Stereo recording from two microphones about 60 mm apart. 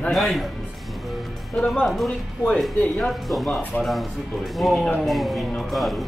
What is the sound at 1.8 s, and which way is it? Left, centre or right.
Speech, centre.